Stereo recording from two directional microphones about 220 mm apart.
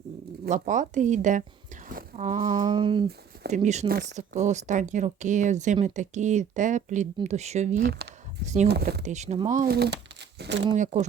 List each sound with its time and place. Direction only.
0.4 s speech: 35° right (ahead or behind)
2.6 s a sound: 20° right (ahead or behind)
3.5 s speech: 30° right (ahead or behind)
8.6 s speech: 50° right (ahead or behind)
9.0 s speech: 30° right (ahead or behind); by 10.6 s 50° right (ahead or behind)